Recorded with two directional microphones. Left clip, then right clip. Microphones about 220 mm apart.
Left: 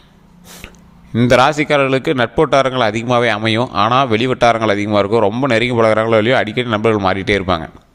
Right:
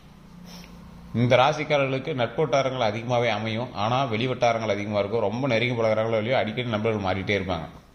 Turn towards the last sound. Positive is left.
turn(degrees=55)  # may be behind; listen again after turning